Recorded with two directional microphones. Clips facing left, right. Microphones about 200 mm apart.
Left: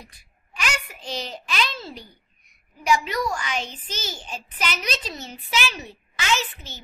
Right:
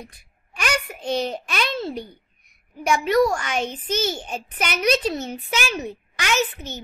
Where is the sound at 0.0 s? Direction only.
55° right (ahead or behind).